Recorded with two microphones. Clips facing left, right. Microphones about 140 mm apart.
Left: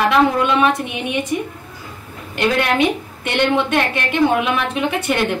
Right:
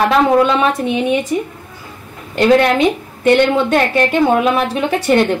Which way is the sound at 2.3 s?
40° right (ahead or behind).